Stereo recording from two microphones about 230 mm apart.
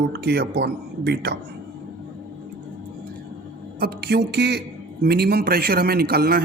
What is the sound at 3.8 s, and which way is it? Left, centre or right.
A man's voice, right.